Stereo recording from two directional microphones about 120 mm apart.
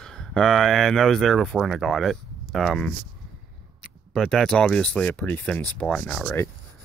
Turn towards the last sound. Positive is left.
turn(degrees=10)  # may be behind; listen again after turning